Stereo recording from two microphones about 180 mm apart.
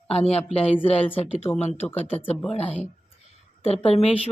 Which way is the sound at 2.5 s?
35° left (ahead or behind).